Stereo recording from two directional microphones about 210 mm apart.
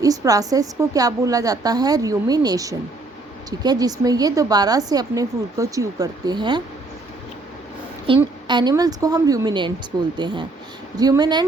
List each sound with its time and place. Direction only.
0.0 s a woman's voice: 15° right (ahead or behind)
8.0 s a woman's voice: 25° right (ahead or behind)